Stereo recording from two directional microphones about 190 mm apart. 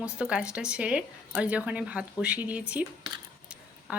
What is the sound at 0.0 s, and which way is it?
Speech, 5° right (ahead or behind).